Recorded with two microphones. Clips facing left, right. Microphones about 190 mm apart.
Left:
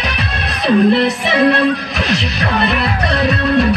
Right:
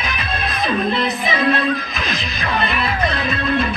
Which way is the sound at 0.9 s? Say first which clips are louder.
Left 7 dB; 75° left (ahead or behind).